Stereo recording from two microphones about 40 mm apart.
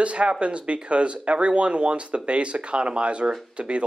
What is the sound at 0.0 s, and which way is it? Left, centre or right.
Speech, right.